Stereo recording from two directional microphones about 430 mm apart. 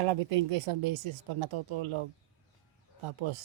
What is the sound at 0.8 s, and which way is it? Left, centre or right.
A woman's voice, right.